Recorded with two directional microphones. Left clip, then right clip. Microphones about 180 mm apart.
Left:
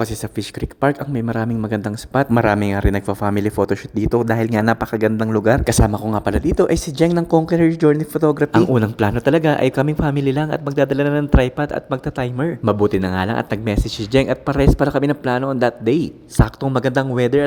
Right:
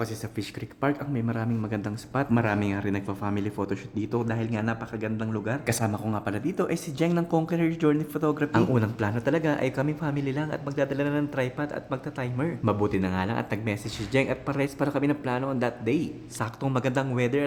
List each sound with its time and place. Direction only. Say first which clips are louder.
0.0 s speech: left 9 dB; 40° left (ahead or behind)